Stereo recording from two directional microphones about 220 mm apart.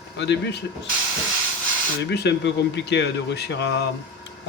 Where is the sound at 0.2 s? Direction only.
50° left (ahead or behind).